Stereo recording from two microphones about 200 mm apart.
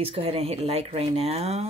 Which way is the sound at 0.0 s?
30° right (ahead or behind).